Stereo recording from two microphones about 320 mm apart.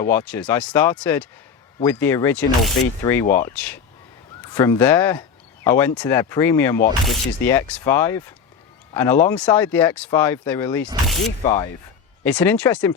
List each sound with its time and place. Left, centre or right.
0.0 s speech: centre
11.4 s speech: centre
12.2 s speech: centre